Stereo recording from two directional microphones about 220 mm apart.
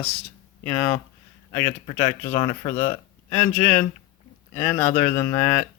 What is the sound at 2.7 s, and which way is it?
Speech, 30° left (ahead or behind).